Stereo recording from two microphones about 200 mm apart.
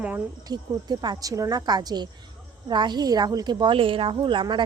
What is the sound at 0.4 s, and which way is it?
A woman's voice, 20° right (ahead or behind).